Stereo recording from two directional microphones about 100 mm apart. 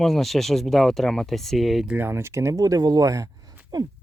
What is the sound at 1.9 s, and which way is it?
Speech, 20° right (ahead or behind).